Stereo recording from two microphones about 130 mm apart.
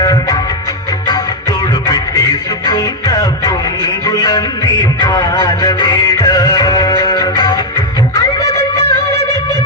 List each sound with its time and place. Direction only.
0.0 s music: 25° left (ahead or behind)
2.6 s music: 25° left (ahead or behind)
4.9 s music: 20° left (ahead or behind)
5.3 s a sound: 25° left (ahead or behind)
6.1 s music: 25° left (ahead or behind)